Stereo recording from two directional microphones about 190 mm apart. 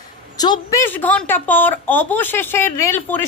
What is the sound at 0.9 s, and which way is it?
A woman's voice, 10° left (ahead or behind).